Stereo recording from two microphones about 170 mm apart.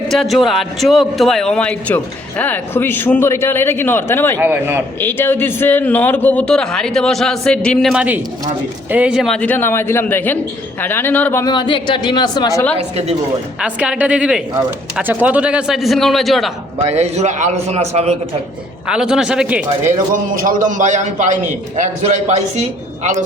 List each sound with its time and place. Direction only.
0.1 s a man's voice: centre (ahead or behind)
4.4 s a woman's voice: 10° right (ahead or behind)
4.9 s a man's voice: 15° left (ahead or behind)
11.5 s speech: 30° left (ahead or behind)
13.6 s a woman's voice: 5° right (ahead or behind)
16.8 s a man's voice: 40° right (ahead or behind)
18.9 s a man's voice: 5° right (ahead or behind)
20.1 s a man's voice: 50° right (ahead or behind)